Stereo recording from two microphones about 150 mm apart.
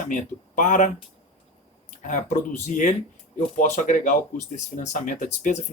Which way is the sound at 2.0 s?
60° left (ahead or behind).